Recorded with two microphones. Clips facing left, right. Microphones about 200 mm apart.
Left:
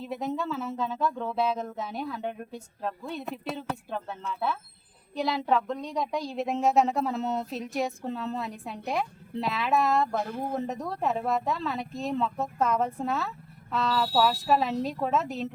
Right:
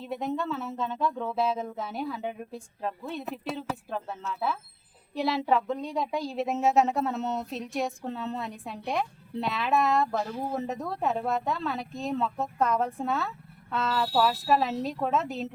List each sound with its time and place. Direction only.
0.0 s speech: centre (ahead or behind)
10.2 s speech: 55° left (ahead or behind)
10.5 s speech: centre (ahead or behind)